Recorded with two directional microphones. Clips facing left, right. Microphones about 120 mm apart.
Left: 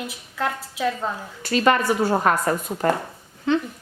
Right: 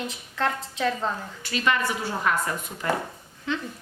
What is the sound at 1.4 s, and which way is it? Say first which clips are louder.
A woman's voice: left 7 dB; 45° left (ahead or behind).